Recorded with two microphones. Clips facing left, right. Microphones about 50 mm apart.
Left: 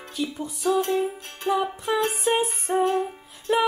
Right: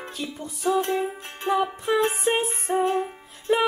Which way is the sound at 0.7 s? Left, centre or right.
Right.